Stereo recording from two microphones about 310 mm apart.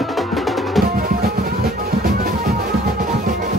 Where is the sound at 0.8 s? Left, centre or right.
Right.